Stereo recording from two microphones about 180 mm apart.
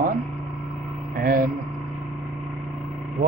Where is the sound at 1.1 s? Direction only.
55° right (ahead or behind).